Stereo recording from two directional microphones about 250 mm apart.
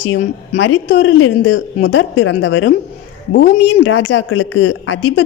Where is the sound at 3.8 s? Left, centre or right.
Left.